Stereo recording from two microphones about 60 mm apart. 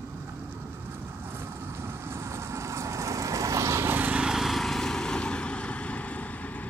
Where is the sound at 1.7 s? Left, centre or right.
Right.